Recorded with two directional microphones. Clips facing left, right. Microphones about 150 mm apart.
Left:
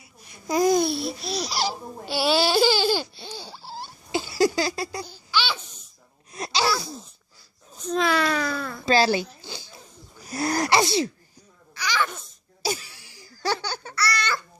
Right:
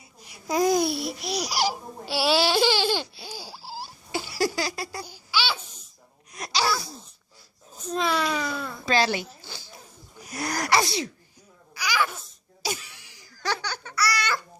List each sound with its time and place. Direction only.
0.4 s babbling: centre (ahead or behind)
4.1 s a sound: 25° left (ahead or behind)
5.0 s babbling: 10° right (ahead or behind)
6.3 s babbling: 25° left (ahead or behind)
6.7 s babbling: centre (ahead or behind)
7.7 s a sound: 5° right (ahead or behind)
8.9 s a sound: 35° left (ahead or behind)
9.4 s zipper: 15° left (ahead or behind)
10.2 s sneeze: 30° left (ahead or behind)
11.7 s babbling: 10° right (ahead or behind)
12.6 s baby laughter: 35° left (ahead or behind)
13.9 s babbling: 10° right (ahead or behind)